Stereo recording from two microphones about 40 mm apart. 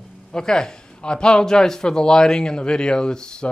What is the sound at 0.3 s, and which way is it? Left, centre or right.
Speech, centre.